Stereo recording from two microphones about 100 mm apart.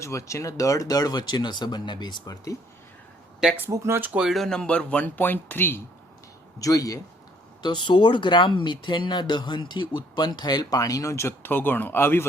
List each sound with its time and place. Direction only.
0.0 s speech: 30° left (ahead or behind)
3.7 s speech: 25° right (ahead or behind)
4.2 s speech: centre (ahead or behind); by 5.8 s 20° left (ahead or behind)
6.6 s speech: 35° left (ahead or behind)
7.6 s speech: 50° left (ahead or behind); by 12.2 s 25° left (ahead or behind)